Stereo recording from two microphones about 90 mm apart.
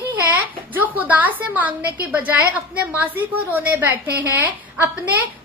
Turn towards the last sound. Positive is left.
turn(degrees=-20)  # may be behind; listen again after turning